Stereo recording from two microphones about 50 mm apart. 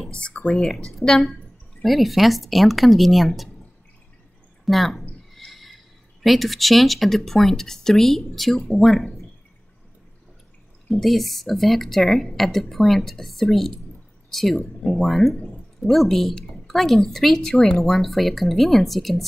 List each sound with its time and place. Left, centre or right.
0.1 s speech: left
0.5 s a woman's voice: centre
4.6 s a woman's voice: centre
5.3 s a sound: centre
6.2 s a woman's voice: centre
10.9 s a woman's voice: centre